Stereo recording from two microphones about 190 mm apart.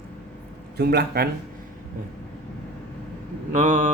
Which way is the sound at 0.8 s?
55° right (ahead or behind).